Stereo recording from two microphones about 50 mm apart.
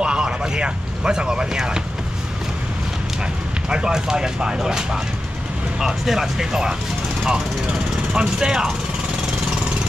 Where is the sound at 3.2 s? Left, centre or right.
Centre.